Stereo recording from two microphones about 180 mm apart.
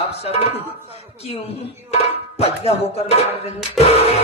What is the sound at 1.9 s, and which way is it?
Speech, 35° left (ahead or behind).